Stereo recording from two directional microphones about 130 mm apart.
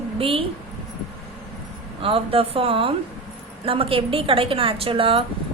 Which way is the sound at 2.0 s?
45° right (ahead or behind).